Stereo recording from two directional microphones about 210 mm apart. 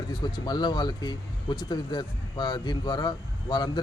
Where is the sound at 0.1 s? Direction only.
20° left (ahead or behind).